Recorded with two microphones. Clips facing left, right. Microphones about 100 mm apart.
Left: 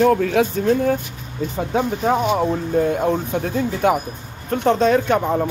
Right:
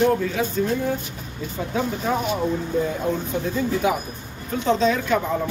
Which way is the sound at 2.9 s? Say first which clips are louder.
Left 5 dB; 60° left (ahead or behind).